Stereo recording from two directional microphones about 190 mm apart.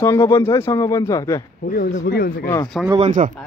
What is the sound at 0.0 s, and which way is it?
Speech, 15° left (ahead or behind).